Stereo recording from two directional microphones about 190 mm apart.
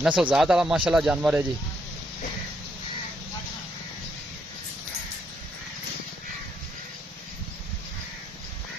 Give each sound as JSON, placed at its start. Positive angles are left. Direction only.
{"t": 0.0, "sound": "speech", "side_deg": -5}